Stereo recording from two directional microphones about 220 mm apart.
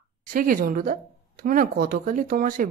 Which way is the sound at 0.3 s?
40° right (ahead or behind).